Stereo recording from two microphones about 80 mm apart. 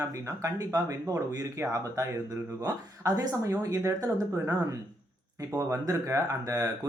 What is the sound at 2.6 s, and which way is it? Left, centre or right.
Speech, right.